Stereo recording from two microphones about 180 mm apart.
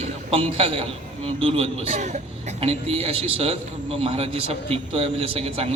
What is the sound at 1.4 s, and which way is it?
A man's voice, 30° right (ahead or behind).